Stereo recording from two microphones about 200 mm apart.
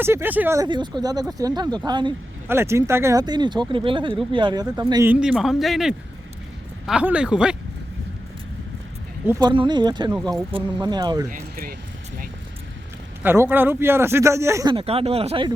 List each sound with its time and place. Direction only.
0.0 s speech: 10° right (ahead or behind)
5.2 s a man's voice: 5° right (ahead or behind)
9.2 s speech: 10° right (ahead or behind)
9.5 s speech: 20° right (ahead or behind)
11.3 s speech: 45° right (ahead or behind)
13.2 s speech: 10° right (ahead or behind); by 15.5 s 30° right (ahead or behind)